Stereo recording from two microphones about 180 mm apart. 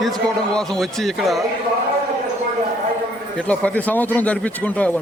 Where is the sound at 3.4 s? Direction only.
5° left (ahead or behind).